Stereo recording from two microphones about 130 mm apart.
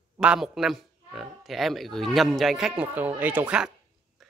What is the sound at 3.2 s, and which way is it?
Speech, 15° right (ahead or behind).